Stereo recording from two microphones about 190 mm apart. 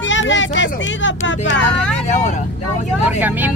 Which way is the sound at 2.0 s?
40° left (ahead or behind).